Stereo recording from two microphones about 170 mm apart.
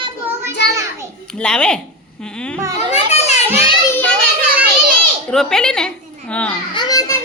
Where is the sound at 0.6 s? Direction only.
90° left.